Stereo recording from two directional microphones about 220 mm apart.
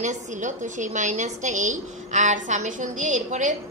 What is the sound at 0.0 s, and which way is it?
A woman's voice, 35° right (ahead or behind).